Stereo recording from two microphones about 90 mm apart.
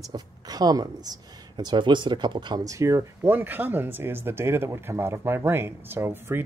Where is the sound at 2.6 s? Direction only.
35° right (ahead or behind).